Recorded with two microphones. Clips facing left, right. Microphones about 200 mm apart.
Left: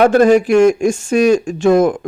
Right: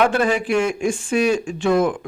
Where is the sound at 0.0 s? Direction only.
45° left (ahead or behind).